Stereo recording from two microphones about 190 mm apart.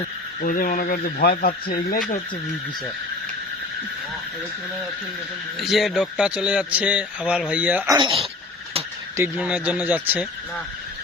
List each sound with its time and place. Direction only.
0.4 s speech: 45° left (ahead or behind)
5.5 s speech: centre (ahead or behind)
7.9 s speech: 30° right (ahead or behind)
9.1 s speech: 10° right (ahead or behind)